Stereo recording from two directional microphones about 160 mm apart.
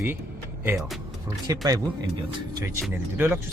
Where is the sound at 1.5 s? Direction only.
20° right (ahead or behind).